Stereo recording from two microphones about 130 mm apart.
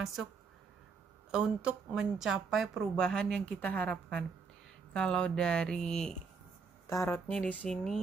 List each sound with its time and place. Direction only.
0.0 s a woman's voice: centre (ahead or behind)
1.3 s a woman's voice: 5° right (ahead or behind)
6.9 s a woman's voice: 25° left (ahead or behind)
7.2 s speech: 10° left (ahead or behind)